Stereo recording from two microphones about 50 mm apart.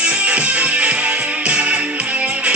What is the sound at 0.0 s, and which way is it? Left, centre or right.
Music, right.